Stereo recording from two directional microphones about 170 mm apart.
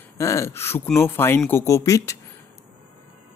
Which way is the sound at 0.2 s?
15° left (ahead or behind).